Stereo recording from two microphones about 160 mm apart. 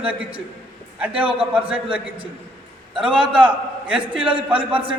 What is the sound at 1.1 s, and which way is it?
Speech, 10° right (ahead or behind).